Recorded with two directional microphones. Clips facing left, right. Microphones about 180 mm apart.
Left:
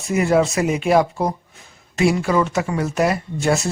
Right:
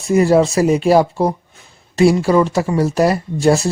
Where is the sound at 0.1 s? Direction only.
35° right (ahead or behind).